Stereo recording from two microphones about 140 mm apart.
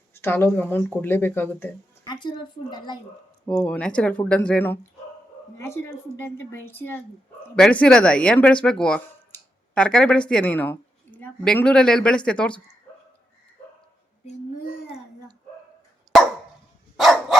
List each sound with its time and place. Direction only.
0.1 s a woman's voice: 15° left (ahead or behind)
2.0 s speech: 35° left (ahead or behind)
3.5 s a woman's voice: 5° left (ahead or behind)
17.0 s dog: centre (ahead or behind)